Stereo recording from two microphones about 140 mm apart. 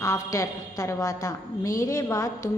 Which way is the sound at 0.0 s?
20° left (ahead or behind).